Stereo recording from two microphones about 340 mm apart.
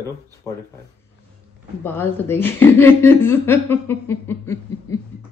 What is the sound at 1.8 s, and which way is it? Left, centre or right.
A woman's voice, centre.